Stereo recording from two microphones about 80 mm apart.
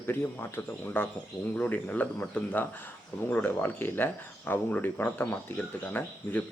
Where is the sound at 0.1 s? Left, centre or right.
Left.